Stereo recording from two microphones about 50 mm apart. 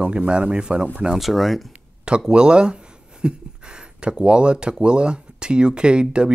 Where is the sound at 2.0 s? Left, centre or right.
Centre.